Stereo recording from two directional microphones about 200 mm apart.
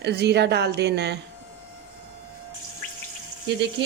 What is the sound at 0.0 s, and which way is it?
Speech, 55° right (ahead or behind).